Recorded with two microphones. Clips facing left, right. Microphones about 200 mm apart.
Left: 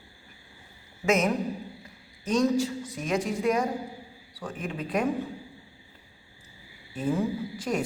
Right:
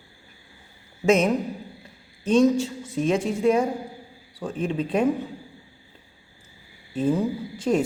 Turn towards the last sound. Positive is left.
turn(degrees=-25)  # may be behind; listen again after turning